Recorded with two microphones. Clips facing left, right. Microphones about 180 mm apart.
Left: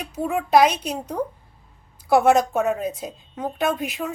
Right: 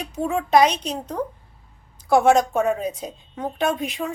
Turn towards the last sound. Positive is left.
turn(degrees=5)  # may be behind; listen again after turning